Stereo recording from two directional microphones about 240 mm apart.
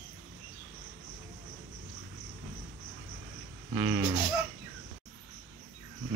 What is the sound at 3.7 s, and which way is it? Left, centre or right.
Speech, centre.